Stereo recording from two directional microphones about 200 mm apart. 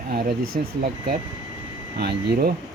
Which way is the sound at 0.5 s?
35° right (ahead or behind).